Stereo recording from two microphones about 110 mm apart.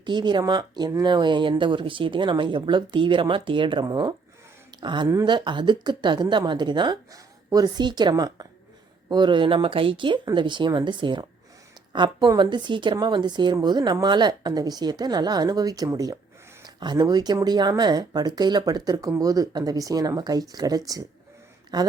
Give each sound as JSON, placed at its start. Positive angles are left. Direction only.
{"t": 0.0, "sound": "a woman's voice", "side_deg": -45}